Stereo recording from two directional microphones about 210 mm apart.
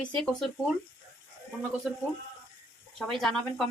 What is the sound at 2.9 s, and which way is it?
Speech, centre (ahead or behind).